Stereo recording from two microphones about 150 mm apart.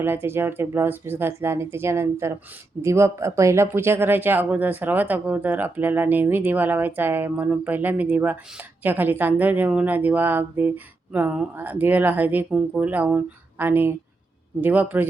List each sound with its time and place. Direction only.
0.0 s speech: 15° right (ahead or behind)